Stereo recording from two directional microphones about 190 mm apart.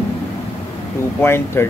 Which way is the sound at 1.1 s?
15° left (ahead or behind).